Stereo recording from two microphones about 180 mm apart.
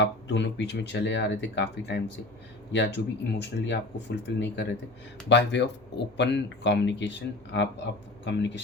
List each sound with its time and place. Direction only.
0.0 s speech: 75° left (ahead or behind)